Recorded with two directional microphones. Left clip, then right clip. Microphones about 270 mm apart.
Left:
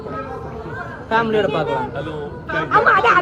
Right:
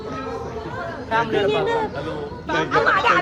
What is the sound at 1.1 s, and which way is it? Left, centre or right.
Speech, left.